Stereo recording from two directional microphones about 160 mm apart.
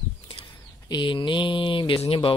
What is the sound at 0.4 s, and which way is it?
Speech, 30° left (ahead or behind).